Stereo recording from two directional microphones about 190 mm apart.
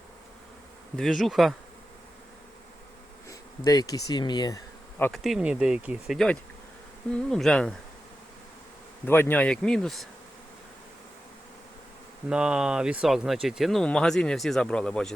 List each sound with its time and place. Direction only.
0.9 s speech: centre (ahead or behind)
3.2 s speech: 20° left (ahead or behind)
5.2 s speech: 5° right (ahead or behind)
9.0 s speech: 10° left (ahead or behind)
12.3 s speech: 5° right (ahead or behind)